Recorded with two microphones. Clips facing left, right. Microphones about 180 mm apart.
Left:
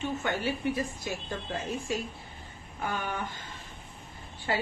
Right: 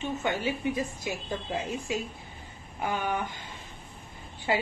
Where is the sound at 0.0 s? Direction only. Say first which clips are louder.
Right 1 dB; 20° right (ahead or behind).